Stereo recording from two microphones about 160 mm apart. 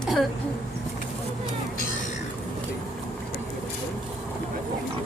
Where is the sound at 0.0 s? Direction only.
Centre (ahead or behind).